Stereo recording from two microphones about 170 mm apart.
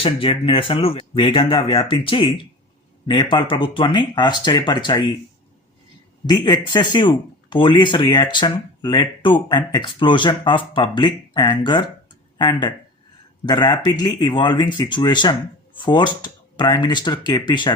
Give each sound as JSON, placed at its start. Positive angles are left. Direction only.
{"t": 0.0, "sound": "speech", "side_deg": 30}
{"t": 6.2, "sound": "speech", "side_deg": 25}